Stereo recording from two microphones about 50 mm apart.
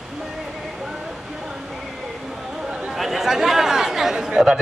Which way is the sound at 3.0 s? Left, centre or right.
Centre.